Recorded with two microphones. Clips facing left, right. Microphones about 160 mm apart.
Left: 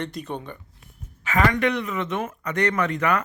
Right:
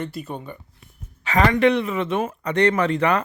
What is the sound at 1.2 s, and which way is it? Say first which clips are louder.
A man's voice: right 4 dB; 35° right (ahead or behind).